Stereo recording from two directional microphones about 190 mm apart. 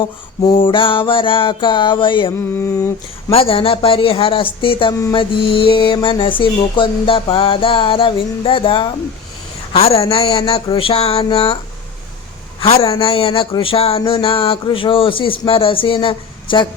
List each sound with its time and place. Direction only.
0.4 s speech: 25° left (ahead or behind)
2.6 s a sound: 15° left (ahead or behind)
3.2 s speech: 30° left (ahead or behind)
12.5 s speech: 30° left (ahead or behind)